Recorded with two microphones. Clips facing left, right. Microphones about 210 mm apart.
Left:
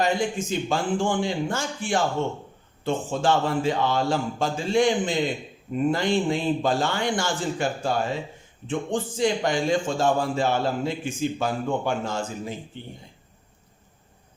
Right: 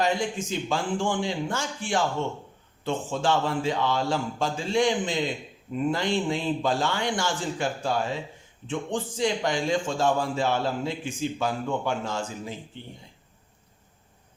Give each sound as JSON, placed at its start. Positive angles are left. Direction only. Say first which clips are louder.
{"t": 0.3, "sound": "a man's voice", "louder": "left 3 dB", "side_deg": 50}